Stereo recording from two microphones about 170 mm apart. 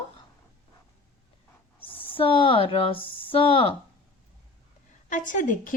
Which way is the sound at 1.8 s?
30° left (ahead or behind).